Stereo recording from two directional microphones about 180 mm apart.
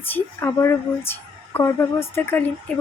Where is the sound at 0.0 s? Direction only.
10° left (ahead or behind).